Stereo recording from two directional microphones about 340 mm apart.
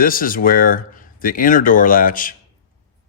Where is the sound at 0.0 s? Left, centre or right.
Left.